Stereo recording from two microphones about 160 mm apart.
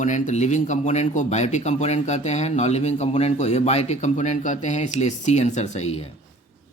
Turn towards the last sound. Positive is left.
turn(degrees=40)  # may be behind; listen again after turning